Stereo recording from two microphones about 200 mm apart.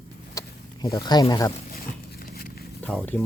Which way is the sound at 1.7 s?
50° left (ahead or behind).